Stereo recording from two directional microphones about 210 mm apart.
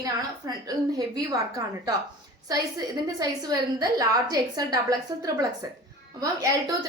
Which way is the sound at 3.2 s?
20° right (ahead or behind).